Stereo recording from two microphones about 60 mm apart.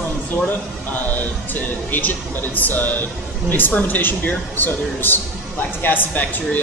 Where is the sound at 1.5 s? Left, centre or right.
Left.